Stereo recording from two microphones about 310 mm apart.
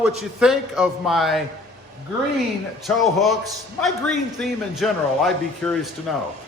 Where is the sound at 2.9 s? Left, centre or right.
Centre.